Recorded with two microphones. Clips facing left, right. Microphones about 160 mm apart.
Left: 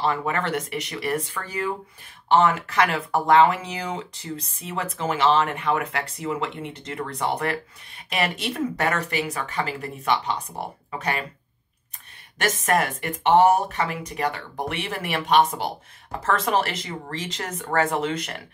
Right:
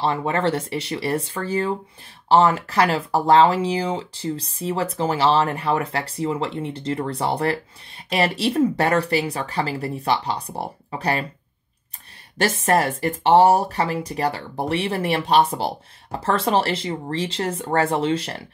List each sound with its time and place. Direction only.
0.0 s speech: 30° right (ahead or behind)
12.4 s speech: 30° right (ahead or behind)